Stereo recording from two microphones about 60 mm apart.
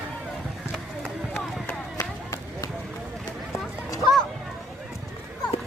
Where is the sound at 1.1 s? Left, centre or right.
Centre.